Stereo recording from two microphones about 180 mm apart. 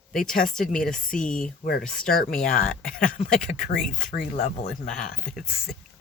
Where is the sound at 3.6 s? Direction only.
45° left (ahead or behind).